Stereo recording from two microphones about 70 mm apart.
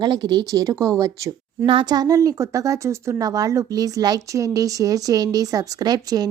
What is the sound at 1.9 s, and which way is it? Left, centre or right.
A woman's voice, right.